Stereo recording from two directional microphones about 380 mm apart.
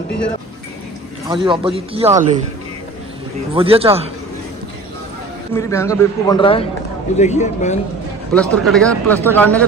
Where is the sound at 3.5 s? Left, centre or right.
Centre.